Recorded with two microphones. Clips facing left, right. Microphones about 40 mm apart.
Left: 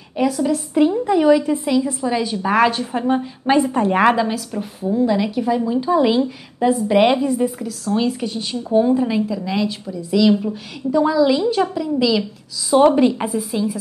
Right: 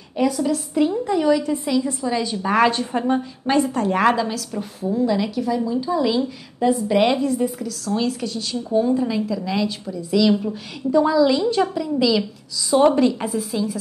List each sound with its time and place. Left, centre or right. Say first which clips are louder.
0.1 s a woman's voice: left 2 dB; centre
5.7 s a woman's voice: left 4 dB; left
6.6 s a woman's voice: left 3 dB; centre
8.3 s a woman's voice: left 3 dB; left
9.4 s a woman's voice: left 2 dB; centre
12.7 s a woman's voice: left 3 dB; centre